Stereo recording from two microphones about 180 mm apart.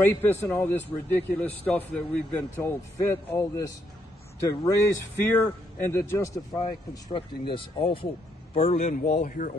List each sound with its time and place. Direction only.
0.0 s a man's voice: 10° left (ahead or behind)
6.6 s speech: 30° left (ahead or behind)
9.0 s speech: 50° left (ahead or behind)